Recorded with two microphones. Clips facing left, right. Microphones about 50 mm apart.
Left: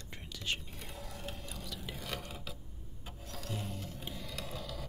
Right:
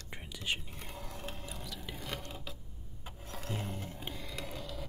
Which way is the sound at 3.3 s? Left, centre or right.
Right.